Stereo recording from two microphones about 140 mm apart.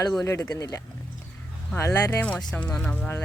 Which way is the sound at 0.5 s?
25° left (ahead or behind).